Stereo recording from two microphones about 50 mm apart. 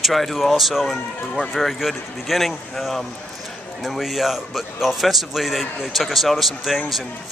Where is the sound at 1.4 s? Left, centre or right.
Right.